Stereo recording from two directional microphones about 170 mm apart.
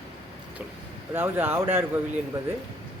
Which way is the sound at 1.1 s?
10° right (ahead or behind).